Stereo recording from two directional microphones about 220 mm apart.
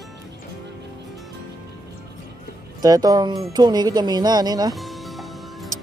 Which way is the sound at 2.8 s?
15° right (ahead or behind).